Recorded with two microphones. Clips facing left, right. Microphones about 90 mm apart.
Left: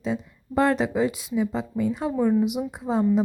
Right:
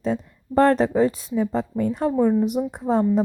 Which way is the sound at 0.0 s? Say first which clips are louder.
Right 3 dB; 45° right (ahead or behind).